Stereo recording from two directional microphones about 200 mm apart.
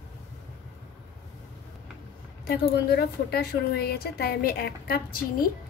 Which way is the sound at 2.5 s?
55° left (ahead or behind).